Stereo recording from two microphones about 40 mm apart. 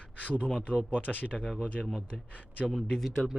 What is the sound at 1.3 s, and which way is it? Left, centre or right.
Speech, centre.